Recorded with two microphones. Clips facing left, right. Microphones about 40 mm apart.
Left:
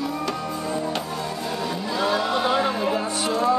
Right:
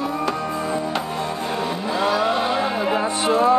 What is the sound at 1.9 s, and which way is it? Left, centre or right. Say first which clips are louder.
Vehicle: right 3 dB; right.